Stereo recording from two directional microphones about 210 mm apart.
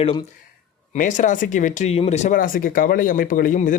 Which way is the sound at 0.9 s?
35° left (ahead or behind).